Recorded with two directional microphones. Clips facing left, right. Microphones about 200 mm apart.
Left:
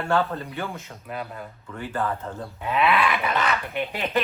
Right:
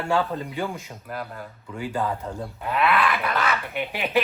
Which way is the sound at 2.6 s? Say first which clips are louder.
Left 1 dB; centre (ahead or behind).